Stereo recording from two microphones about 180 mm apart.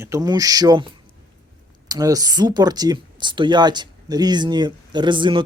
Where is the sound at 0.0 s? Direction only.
20° right (ahead or behind).